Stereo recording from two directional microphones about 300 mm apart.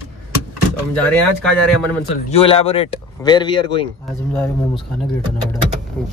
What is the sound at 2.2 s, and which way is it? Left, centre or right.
Speech, centre.